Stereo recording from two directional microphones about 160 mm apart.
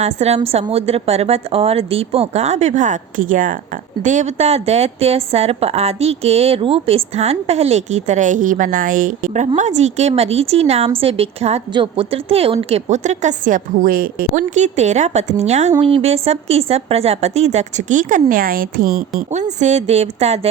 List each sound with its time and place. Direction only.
0.0 s a woman's voice: 40° right (ahead or behind); by 19.0 s 65° right (ahead or behind)
19.3 s a woman's voice: 45° right (ahead or behind)